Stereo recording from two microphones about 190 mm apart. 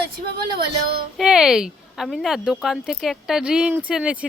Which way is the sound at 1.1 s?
5° right (ahead or behind).